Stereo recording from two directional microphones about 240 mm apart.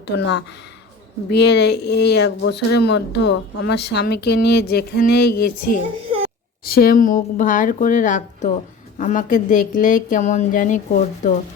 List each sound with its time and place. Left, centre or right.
0.2 s speech: left